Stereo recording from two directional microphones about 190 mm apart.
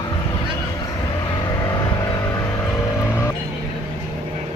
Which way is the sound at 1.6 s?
20° left (ahead or behind).